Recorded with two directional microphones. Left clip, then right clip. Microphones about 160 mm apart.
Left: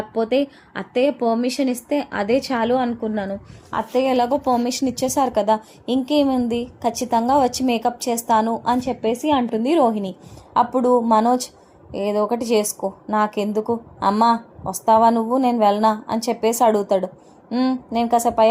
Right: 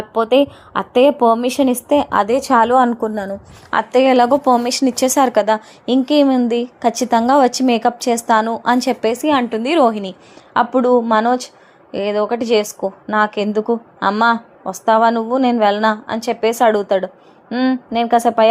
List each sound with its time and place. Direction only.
0.1 s a woman's voice: 25° right (ahead or behind)
3.7 s a woman's voice: 40° right (ahead or behind)